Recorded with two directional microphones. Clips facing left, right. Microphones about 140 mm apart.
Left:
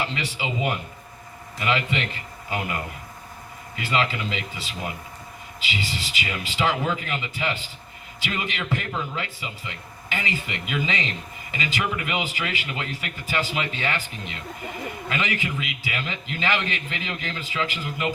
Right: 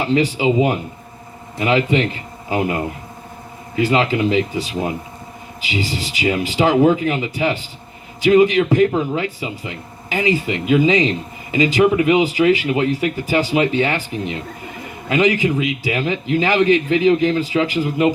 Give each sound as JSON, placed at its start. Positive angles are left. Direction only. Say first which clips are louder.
{"t": 0.0, "sound": "a man's voice", "louder": "right 12 dB", "side_deg": -40}
{"t": 5.8, "sound": "a man's voice", "louder": "right 14 dB", "side_deg": -35}